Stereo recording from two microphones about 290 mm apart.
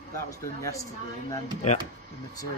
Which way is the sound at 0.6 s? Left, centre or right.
Centre.